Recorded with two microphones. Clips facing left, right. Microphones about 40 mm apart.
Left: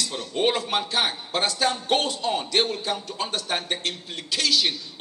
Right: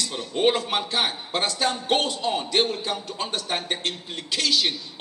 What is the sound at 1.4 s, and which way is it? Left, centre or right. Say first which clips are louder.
A man's voice: left 1 dB; right.